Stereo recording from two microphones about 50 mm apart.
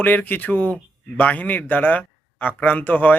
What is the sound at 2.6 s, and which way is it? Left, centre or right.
Speech, left.